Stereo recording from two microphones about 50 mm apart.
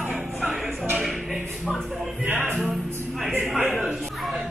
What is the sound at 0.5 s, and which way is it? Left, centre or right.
Music, centre.